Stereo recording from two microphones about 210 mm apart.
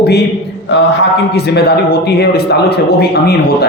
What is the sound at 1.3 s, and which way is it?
A man's voice, 50° left (ahead or behind).